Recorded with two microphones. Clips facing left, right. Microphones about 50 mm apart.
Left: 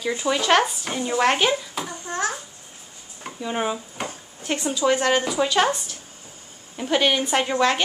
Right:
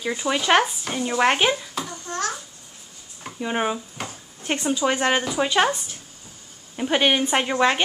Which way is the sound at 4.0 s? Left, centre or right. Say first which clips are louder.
Left 3 dB; centre.